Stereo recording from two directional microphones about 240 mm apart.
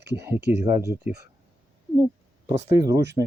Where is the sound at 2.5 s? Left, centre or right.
Centre.